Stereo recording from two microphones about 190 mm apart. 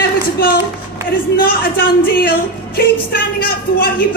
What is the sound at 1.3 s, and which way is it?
Music, 50° left (ahead or behind).